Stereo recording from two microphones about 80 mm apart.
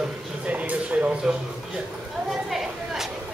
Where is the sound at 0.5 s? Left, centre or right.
Centre.